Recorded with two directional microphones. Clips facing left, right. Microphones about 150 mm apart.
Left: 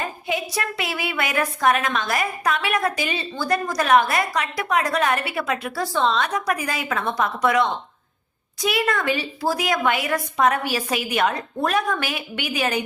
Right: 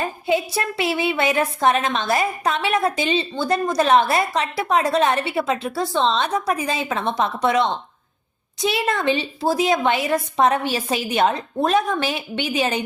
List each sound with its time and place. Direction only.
0.0 s speech: 30° right (ahead or behind)